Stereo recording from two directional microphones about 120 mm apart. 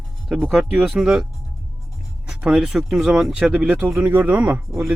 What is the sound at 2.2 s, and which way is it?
Speech, 5° right (ahead or behind).